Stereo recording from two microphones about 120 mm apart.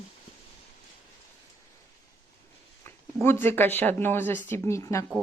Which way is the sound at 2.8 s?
20° left (ahead or behind).